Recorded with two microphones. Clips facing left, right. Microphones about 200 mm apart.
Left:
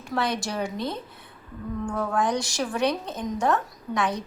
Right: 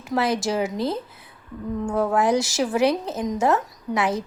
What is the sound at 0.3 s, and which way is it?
Speech, 5° right (ahead or behind).